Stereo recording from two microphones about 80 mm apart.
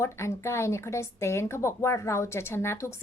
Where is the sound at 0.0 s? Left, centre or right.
Left.